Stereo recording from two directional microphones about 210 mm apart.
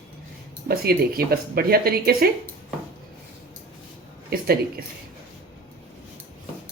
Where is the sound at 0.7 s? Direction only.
45° right (ahead or behind).